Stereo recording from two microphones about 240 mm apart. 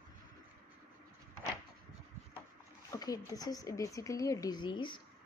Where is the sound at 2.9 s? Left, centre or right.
Centre.